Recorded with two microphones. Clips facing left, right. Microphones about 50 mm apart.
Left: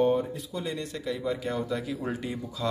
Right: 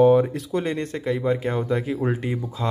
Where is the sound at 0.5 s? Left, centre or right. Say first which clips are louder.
Right 9 dB; right.